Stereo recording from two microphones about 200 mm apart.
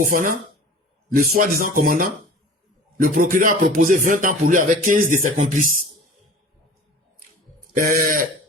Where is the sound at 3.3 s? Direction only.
40° right (ahead or behind).